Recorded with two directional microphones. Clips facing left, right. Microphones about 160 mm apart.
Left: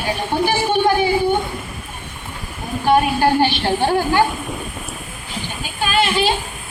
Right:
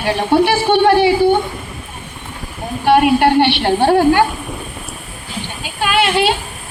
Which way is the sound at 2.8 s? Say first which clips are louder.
Right 4 dB; 65° right (ahead or behind).